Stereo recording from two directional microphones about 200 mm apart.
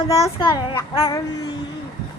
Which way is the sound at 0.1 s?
20° left (ahead or behind).